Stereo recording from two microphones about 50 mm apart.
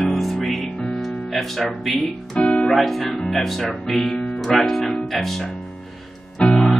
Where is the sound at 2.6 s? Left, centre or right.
Centre.